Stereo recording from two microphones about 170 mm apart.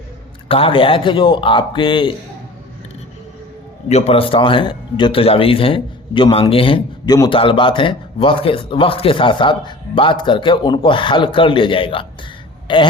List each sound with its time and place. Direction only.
0.4 s speech: 35° left (ahead or behind)
3.8 s speech: 40° left (ahead or behind)
12.6 s throat clearing: 25° left (ahead or behind)